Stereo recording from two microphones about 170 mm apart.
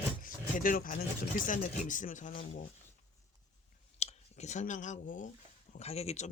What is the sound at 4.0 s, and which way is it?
Speech, 40° left (ahead or behind).